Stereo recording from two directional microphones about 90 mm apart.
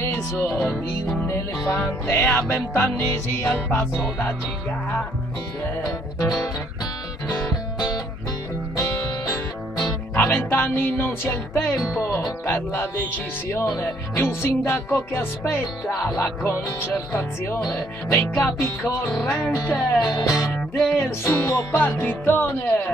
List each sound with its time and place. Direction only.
0.0 s music: 30° left (ahead or behind)
8.7 s music: 35° left (ahead or behind)
10.1 s music: 20° left (ahead or behind)
11.7 s speech: 5° left (ahead or behind)
12.0 s speech: 30° left (ahead or behind)
12.4 s music: 25° left (ahead or behind)
17.6 s music: 15° left (ahead or behind)
18.6 s music: 30° left (ahead or behind)
20.2 s speech: 40° left (ahead or behind)
20.4 s music: 10° left (ahead or behind)
20.9 s music: 25° left (ahead or behind)